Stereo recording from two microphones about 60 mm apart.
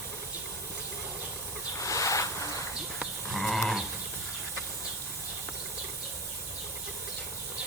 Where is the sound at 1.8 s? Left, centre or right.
Left.